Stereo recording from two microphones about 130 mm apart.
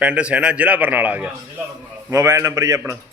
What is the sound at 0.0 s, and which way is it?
A man's voice, 10° right (ahead or behind).